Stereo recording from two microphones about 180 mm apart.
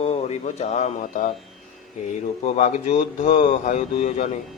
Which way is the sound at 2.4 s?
35° left (ahead or behind).